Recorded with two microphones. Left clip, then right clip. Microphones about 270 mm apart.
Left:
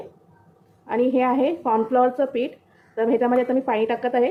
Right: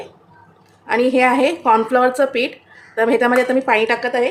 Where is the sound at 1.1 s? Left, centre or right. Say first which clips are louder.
Right 7 dB; centre.